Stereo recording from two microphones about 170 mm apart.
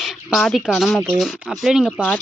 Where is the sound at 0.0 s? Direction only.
Centre (ahead or behind).